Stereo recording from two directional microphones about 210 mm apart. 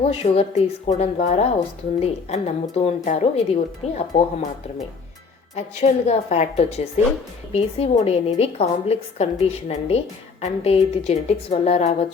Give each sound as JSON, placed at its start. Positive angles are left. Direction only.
{"t": 0.0, "sound": "a woman's voice", "side_deg": 30}
{"t": 5.8, "sound": "a woman's voice", "side_deg": 30}